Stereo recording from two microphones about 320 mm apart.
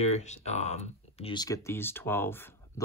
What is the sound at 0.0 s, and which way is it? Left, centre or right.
Speech, left.